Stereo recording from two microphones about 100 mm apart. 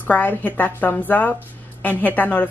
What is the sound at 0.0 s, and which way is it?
A woman's voice, 15° left (ahead or behind).